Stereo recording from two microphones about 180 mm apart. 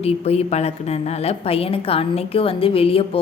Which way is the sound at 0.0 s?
35° left (ahead or behind).